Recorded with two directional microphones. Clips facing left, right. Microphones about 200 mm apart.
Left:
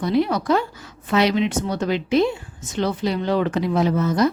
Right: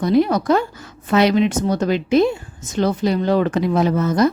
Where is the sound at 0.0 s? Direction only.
45° right (ahead or behind).